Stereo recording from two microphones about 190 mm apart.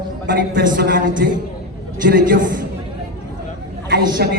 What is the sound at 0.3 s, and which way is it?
A man's voice, 45° right (ahead or behind).